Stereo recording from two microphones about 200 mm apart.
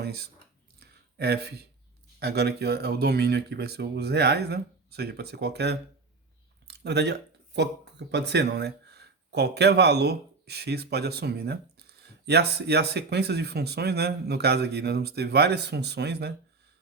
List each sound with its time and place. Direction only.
0.0 s speech: 55° right (ahead or behind)
0.8 s a sound: 55° right (ahead or behind)
2.1 s speech: 55° right (ahead or behind)